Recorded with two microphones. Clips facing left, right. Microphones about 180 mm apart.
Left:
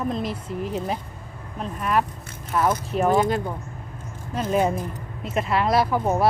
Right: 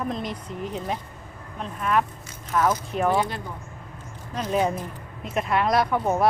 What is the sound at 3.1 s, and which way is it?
Speech, 45° left (ahead or behind).